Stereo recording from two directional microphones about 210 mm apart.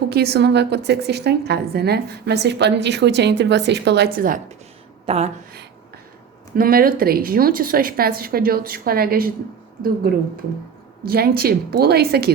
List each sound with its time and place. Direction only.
0.1 s a woman's voice: 50° right (ahead or behind)
5.0 s speech: 30° right (ahead or behind)
6.6 s a woman's voice: 45° right (ahead or behind)